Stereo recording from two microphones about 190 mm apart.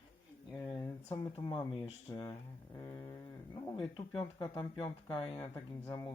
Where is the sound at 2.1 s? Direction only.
15° left (ahead or behind).